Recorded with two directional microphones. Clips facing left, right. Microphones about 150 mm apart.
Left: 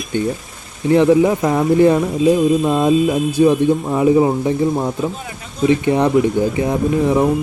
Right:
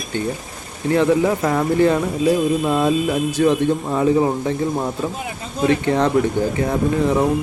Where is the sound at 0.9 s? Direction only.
20° left (ahead or behind).